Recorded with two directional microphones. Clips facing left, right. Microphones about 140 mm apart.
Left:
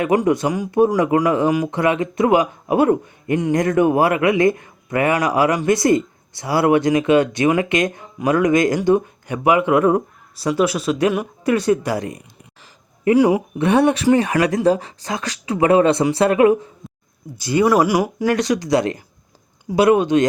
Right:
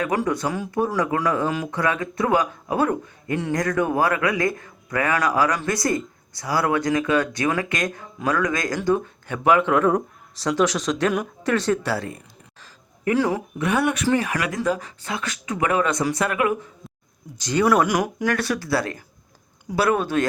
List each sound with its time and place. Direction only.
0.0 s speech: 20° left (ahead or behind)
13.6 s speech: 30° left (ahead or behind)
16.8 s a sound: centre (ahead or behind)
17.3 s speech: 10° left (ahead or behind)